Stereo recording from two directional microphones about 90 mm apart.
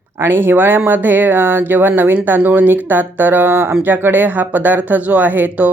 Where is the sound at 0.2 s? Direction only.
25° right (ahead or behind).